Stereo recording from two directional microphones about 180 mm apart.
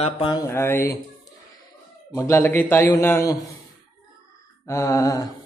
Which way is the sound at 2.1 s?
15° left (ahead or behind).